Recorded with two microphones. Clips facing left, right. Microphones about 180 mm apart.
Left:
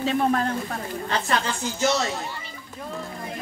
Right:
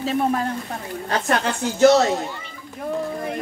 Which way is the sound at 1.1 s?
55° right (ahead or behind).